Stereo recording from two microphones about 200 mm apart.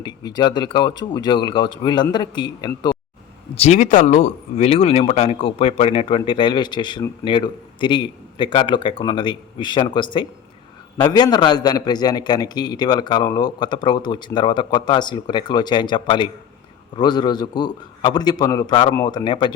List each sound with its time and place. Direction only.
0.0 s speech: 20° left (ahead or behind)
3.5 s speech: 35° left (ahead or behind)